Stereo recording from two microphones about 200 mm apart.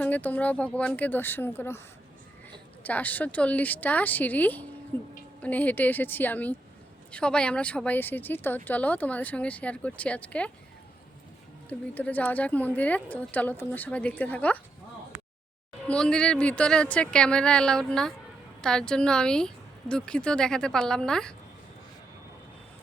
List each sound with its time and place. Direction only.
0.0 s speech: 10° left (ahead or behind)
2.8 s speech: 10° left (ahead or behind)
11.7 s speech: 5° left (ahead or behind)
15.9 s speech: 5° left (ahead or behind)